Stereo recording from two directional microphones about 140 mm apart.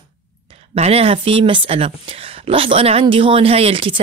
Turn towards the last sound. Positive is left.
turn(degrees=-40)  # may be behind; listen again after turning